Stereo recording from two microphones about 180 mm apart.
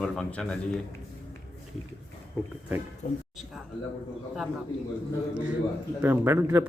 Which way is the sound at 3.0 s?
40° left (ahead or behind).